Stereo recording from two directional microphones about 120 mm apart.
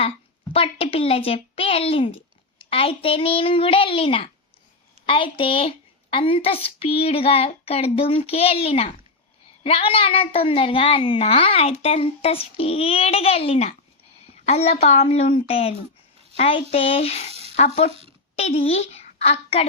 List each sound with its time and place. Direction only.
0.5 s a woman's voice: 50° left (ahead or behind)